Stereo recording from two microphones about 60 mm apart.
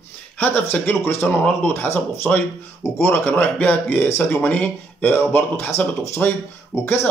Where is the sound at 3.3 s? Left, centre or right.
Left.